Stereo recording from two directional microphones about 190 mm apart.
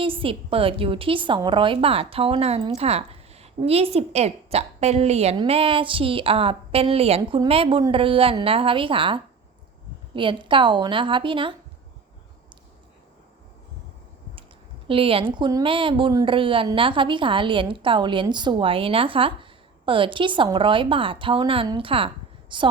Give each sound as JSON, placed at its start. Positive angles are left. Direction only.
{"t": 0.0, "sound": "a woman's voice", "side_deg": -30}
{"t": 14.8, "sound": "a woman's voice", "side_deg": -30}